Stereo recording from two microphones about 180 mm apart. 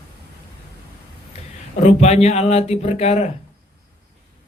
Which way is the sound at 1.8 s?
40° left (ahead or behind).